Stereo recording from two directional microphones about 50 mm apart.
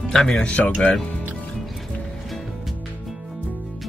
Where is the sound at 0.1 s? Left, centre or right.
Centre.